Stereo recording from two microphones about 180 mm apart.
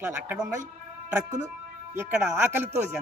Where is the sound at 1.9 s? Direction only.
5° right (ahead or behind).